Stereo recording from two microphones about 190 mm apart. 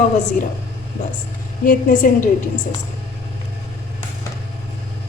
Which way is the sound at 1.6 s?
45° left (ahead or behind).